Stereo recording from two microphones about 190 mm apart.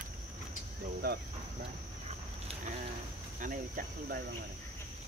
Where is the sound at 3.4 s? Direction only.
45° right (ahead or behind).